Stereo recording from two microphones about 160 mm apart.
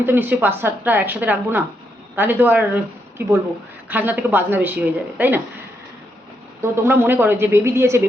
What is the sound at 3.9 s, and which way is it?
A woman's voice, 10° right (ahead or behind).